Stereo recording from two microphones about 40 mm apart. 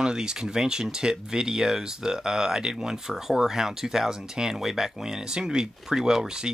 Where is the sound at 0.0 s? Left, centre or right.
Centre.